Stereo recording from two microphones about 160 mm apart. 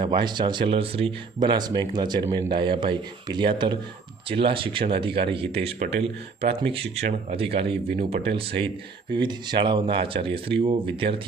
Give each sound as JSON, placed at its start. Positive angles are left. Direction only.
{"t": 0.0, "sound": "speech", "side_deg": -30}